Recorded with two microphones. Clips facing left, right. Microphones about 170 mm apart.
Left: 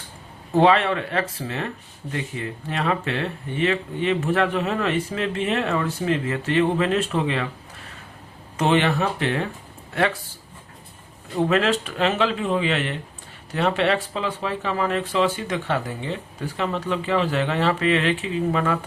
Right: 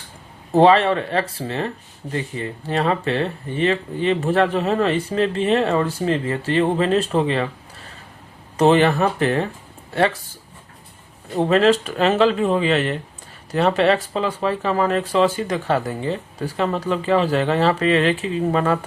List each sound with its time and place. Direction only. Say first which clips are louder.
0.5 s speech: right 4 dB; 35° right (ahead or behind)
8.5 s speech: right 5 dB; 35° right (ahead or behind)
11.3 s speech: right 5 dB; 35° right (ahead or behind)